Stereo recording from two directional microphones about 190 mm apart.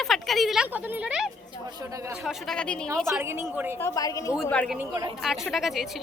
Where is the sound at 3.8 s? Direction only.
15° left (ahead or behind).